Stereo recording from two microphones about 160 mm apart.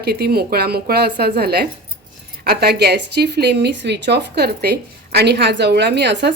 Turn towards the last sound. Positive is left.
turn(degrees=-90)